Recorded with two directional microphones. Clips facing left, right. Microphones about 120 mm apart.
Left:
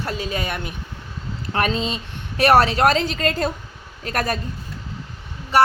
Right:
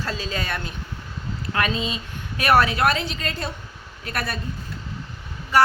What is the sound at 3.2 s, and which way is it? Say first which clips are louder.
A woman's voice: left 8 dB; 50° left (ahead or behind).